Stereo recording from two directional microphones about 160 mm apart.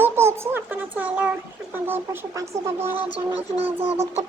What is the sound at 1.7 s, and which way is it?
Speech, 15° right (ahead or behind).